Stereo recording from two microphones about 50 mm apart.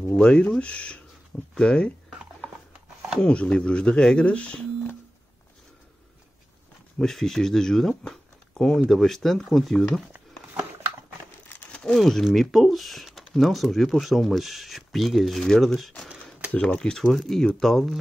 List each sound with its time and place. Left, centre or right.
0.2 s speech: centre
3.2 s speech: left
7.0 s speech: centre
11.9 s speech: centre
16.6 s speech: centre
17.0 s speech: centre